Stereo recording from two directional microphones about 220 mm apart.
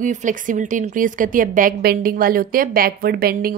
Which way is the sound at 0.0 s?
35° right (ahead or behind).